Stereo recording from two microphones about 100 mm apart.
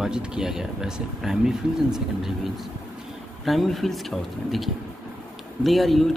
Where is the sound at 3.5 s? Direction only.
Centre (ahead or behind).